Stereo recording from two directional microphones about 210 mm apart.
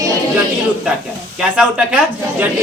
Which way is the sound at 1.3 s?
5° right (ahead or behind).